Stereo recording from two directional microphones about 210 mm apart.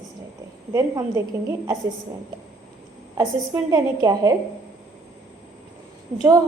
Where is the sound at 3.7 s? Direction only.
15° right (ahead or behind).